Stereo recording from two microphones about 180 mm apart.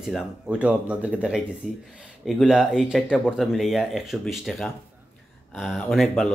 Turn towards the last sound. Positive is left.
turn(degrees=0)  # may be behind; listen again after turning